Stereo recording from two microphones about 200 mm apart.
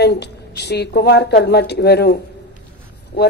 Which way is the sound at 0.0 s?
55° left (ahead or behind).